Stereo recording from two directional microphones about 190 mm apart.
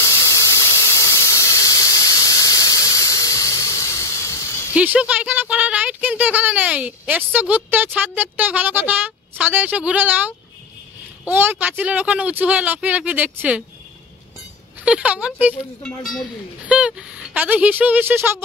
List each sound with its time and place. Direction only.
0.0 s squeal: 15° left (ahead or behind)
4.7 s speech: 5° right (ahead or behind)
14.9 s speech: 5° right (ahead or behind)